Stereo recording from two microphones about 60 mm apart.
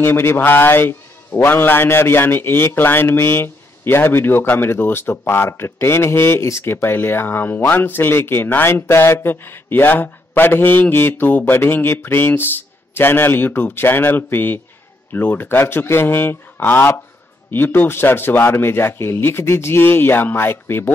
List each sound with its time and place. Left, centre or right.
0.0 s a man's voice: left